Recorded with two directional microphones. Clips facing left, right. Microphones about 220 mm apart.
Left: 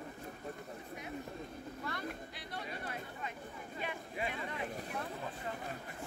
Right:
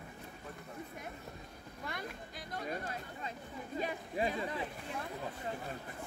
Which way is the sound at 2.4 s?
45° right (ahead or behind).